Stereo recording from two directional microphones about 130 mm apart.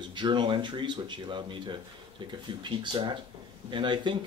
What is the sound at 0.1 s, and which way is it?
Speech, 35° right (ahead or behind).